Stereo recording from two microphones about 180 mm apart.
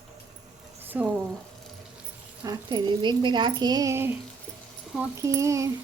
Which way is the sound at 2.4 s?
20° right (ahead or behind).